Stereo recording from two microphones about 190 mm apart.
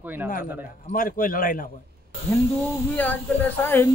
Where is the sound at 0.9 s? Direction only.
50° left (ahead or behind).